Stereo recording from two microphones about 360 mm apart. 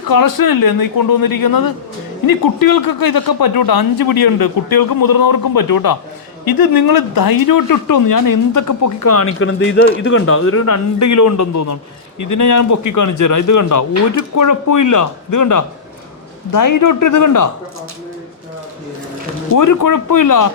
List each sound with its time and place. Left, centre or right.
0.1 s a man's voice: left
19.5 s speech: left